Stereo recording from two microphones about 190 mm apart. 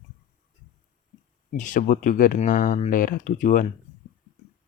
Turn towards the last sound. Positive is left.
turn(degrees=40)  # may be behind; listen again after turning